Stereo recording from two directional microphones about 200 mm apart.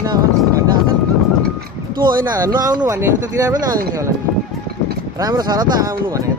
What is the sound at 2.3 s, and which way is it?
Speech, 20° right (ahead or behind).